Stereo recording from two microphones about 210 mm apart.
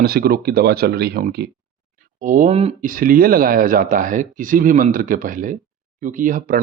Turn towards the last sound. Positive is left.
turn(degrees=-40)  # may be behind; listen again after turning